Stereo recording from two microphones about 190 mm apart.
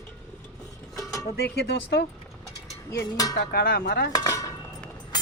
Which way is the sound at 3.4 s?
55° left (ahead or behind).